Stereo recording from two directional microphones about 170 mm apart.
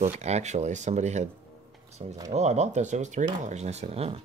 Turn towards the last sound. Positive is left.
turn(degrees=-40)  # may be behind; listen again after turning